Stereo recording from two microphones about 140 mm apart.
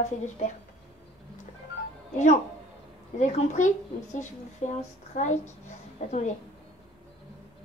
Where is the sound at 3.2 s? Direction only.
60° left (ahead or behind).